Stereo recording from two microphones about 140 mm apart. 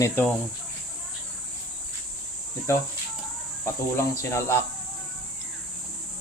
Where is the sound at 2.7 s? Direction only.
20° left (ahead or behind).